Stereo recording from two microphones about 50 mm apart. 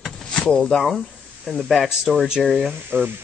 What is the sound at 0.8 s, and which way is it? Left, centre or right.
Speech, centre.